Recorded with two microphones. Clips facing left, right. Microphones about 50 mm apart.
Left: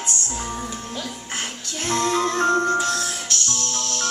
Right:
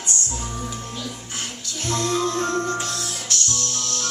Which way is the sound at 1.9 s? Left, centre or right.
Left.